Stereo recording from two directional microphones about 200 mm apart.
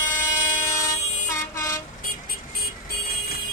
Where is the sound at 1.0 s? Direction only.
35° left (ahead or behind).